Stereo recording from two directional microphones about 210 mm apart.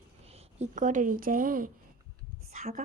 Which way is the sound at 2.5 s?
35° right (ahead or behind).